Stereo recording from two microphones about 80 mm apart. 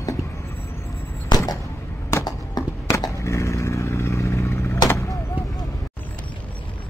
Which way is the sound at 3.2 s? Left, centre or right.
Left.